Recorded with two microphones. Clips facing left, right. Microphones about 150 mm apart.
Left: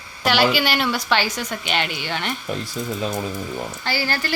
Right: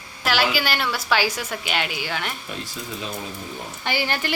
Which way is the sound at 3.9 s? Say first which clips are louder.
Right 1 dB; 20° right (ahead or behind).